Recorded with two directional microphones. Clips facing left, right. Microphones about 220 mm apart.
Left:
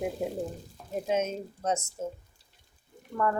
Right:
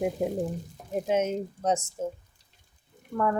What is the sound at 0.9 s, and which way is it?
Speech, 15° right (ahead or behind).